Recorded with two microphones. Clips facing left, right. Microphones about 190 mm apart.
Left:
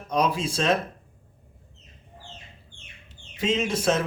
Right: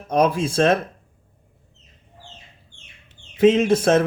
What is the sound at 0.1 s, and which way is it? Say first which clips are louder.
Speech: right 6 dB; 50° right (ahead or behind).